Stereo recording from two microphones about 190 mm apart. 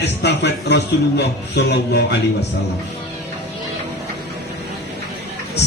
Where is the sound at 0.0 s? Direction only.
65° left (ahead or behind).